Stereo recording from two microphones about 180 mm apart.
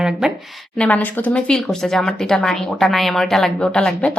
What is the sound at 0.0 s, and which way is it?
Speech, 5° right (ahead or behind).